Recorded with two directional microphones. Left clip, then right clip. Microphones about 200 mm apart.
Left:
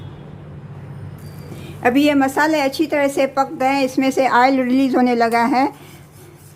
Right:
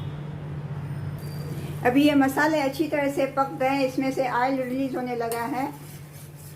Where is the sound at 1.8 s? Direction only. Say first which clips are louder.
Left 5 dB; 35° left (ahead or behind).